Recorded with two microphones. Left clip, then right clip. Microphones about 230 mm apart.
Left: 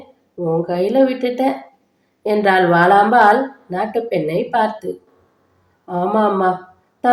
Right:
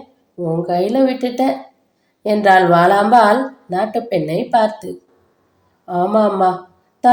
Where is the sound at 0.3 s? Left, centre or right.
Right.